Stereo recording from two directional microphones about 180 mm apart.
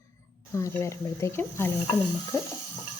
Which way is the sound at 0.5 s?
15° left (ahead or behind).